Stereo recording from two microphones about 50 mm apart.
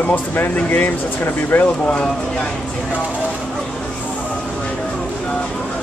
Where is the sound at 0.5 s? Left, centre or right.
Left.